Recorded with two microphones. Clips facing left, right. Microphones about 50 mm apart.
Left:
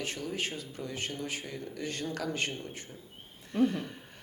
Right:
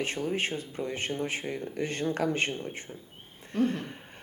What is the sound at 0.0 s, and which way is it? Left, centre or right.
Speech, right.